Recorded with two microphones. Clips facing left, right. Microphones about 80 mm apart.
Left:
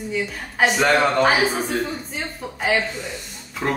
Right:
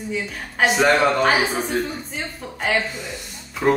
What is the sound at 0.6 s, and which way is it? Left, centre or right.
A woman's voice, centre.